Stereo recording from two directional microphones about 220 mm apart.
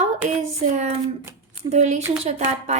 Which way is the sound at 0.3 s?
35° right (ahead or behind).